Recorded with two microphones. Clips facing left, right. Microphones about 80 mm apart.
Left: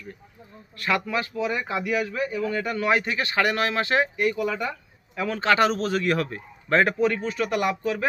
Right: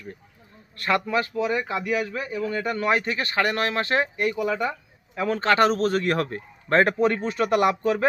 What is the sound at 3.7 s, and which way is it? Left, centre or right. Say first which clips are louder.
Speech: even; centre.